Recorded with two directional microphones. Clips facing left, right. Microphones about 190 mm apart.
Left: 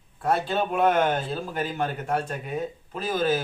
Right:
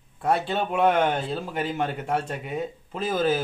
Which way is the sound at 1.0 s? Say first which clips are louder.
Even; 20° right (ahead or behind).